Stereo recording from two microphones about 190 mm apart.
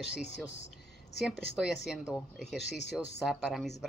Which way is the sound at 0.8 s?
60° left (ahead or behind).